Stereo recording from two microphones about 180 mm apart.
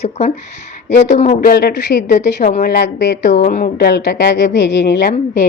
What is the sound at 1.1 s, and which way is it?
Speech, 40° left (ahead or behind).